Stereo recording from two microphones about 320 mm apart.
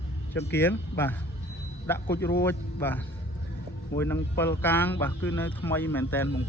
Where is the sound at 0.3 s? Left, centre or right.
Centre.